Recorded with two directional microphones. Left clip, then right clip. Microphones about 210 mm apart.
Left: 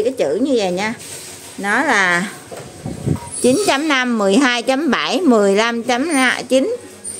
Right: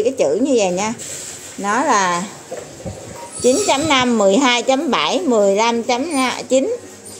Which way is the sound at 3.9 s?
25° left (ahead or behind).